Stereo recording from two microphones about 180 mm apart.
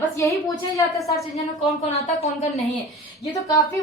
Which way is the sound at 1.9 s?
40° left (ahead or behind).